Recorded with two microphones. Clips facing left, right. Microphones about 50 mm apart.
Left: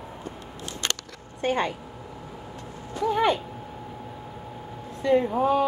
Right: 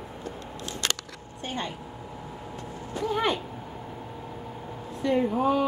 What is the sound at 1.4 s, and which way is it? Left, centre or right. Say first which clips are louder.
Speech: left 8 dB; left.